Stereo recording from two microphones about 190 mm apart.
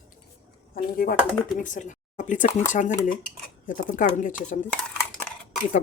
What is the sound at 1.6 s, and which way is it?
Speech, 40° left (ahead or behind).